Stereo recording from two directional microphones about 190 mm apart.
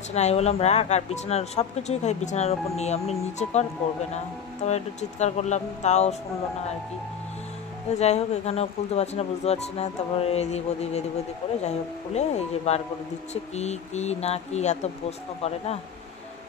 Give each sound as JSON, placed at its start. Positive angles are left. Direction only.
{"t": 0.1, "sound": "speech", "side_deg": 35}
{"t": 4.6, "sound": "speech", "side_deg": 35}
{"t": 7.9, "sound": "speech", "side_deg": 35}